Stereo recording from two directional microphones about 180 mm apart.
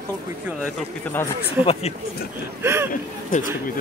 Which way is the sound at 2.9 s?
45° left (ahead or behind).